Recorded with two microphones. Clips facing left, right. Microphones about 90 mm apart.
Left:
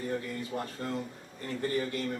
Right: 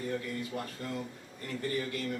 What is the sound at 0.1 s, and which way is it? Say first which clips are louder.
Speech: left 1 dB; 30° left (ahead or behind).